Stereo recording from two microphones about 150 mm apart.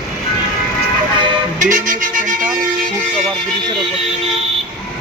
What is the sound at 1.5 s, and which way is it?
Music, 60° right (ahead or behind).